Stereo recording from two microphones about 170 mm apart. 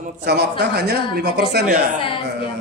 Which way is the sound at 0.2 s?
80° right.